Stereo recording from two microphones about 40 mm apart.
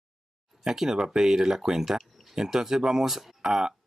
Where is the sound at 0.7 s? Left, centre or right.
Centre.